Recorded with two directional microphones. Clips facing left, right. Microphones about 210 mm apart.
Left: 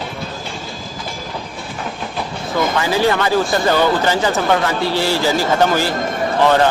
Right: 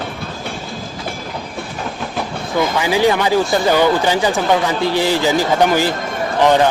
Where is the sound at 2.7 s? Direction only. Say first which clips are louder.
Right 2 dB; 15° right (ahead or behind).